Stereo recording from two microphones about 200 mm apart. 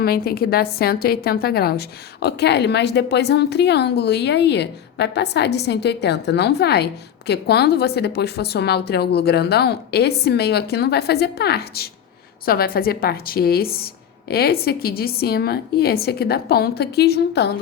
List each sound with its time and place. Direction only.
0.0 s a woman's voice: 50° left (ahead or behind)